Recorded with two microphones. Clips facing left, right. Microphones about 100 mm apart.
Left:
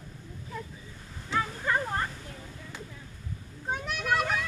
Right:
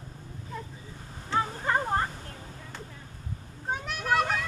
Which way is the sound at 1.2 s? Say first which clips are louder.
Right 1 dB; 40° right (ahead or behind).